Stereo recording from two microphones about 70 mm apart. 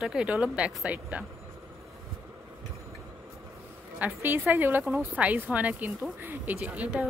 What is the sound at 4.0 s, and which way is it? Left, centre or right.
A woman's voice, right.